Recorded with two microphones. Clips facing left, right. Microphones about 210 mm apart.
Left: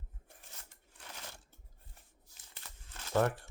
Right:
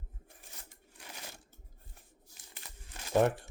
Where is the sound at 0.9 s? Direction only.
10° right (ahead or behind).